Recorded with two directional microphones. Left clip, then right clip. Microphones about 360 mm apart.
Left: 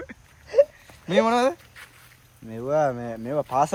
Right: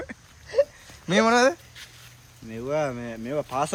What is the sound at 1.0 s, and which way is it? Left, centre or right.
Speech, centre.